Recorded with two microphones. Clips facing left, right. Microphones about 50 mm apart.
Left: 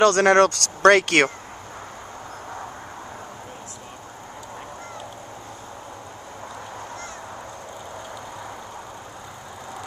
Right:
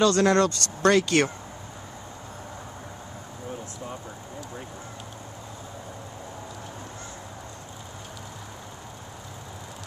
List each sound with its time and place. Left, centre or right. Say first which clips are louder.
0.0 s speech: left 5 dB; left